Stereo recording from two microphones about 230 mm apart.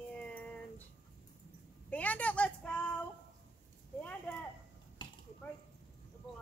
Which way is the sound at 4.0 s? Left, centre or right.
Centre.